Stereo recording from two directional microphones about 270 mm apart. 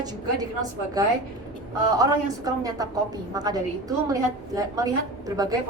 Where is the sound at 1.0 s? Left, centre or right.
Centre.